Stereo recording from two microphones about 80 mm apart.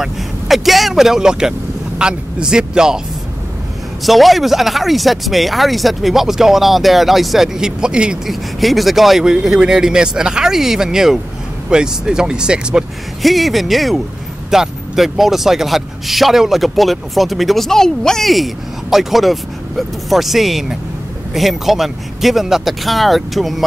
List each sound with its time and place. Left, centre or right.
0.0 s speech: centre
4.0 s speech: centre
8.5 s speech: centre